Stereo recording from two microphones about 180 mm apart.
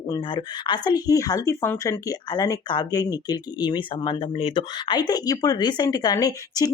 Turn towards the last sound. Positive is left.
turn(degrees=20)  # may be behind; listen again after turning